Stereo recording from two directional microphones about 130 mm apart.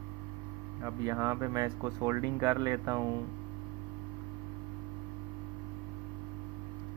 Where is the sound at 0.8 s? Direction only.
20° right (ahead or behind).